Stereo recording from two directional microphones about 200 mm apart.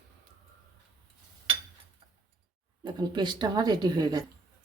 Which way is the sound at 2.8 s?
20° right (ahead or behind).